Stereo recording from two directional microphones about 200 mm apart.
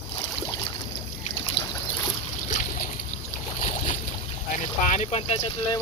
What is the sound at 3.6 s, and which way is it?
Boat, 35° left (ahead or behind).